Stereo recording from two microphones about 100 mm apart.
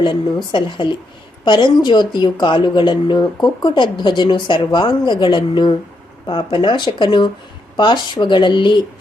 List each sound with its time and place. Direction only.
0.0 s speech: 50° left (ahead or behind)